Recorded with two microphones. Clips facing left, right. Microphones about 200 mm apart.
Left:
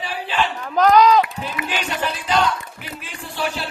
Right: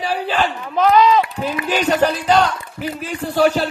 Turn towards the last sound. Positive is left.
turn(degrees=-40)  # may be behind; listen again after turning